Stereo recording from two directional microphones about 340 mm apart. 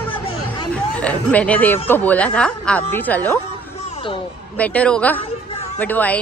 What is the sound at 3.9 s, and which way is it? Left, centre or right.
Basketball bounce, centre.